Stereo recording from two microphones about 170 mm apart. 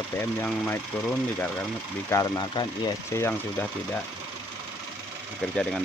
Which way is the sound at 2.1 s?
25° left (ahead or behind).